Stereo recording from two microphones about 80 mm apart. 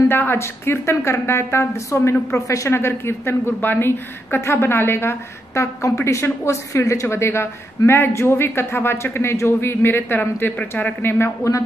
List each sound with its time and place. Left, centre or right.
0.1 s a woman's voice: left